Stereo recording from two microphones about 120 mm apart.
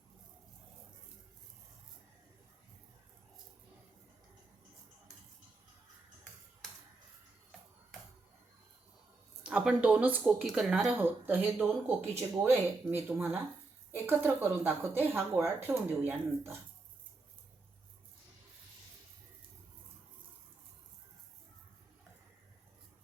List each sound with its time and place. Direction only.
9.4 s speech: 10° right (ahead or behind)
10.9 s speech: 20° right (ahead or behind)